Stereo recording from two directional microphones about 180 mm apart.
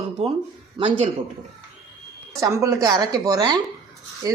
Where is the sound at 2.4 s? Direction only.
15° right (ahead or behind).